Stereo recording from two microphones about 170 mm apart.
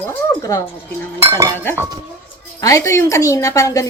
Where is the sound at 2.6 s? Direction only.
20° left (ahead or behind).